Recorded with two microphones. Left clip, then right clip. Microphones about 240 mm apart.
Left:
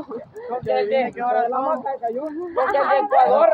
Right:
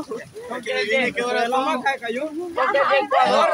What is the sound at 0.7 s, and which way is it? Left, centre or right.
Speech, centre.